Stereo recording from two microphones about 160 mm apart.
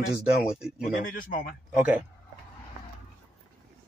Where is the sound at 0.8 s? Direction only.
55° left (ahead or behind).